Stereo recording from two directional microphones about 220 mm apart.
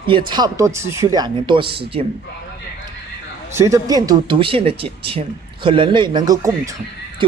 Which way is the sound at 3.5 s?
15° right (ahead or behind).